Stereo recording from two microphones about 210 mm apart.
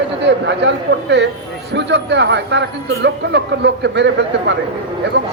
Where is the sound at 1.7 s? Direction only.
55° right (ahead or behind).